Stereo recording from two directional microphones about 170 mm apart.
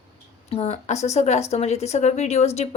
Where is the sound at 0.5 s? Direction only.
40° left (ahead or behind).